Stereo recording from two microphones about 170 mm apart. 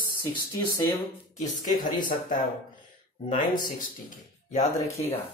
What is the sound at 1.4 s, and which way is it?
Speech, 25° left (ahead or behind).